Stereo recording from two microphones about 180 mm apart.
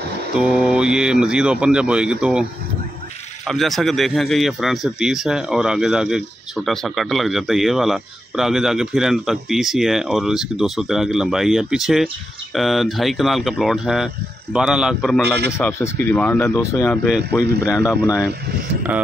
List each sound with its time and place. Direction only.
0.4 s speech: 5° right (ahead or behind)
3.4 s speech: centre (ahead or behind)
15.5 s speech: 15° left (ahead or behind)